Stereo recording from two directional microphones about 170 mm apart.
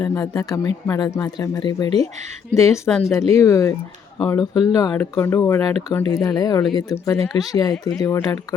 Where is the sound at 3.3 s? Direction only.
20° left (ahead or behind).